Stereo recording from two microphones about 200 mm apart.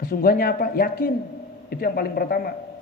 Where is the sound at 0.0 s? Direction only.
45° left (ahead or behind).